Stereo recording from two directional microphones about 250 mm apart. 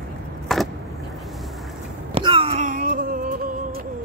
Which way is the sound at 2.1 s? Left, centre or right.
Right.